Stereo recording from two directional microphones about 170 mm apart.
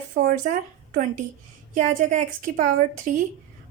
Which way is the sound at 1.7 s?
45° right (ahead or behind).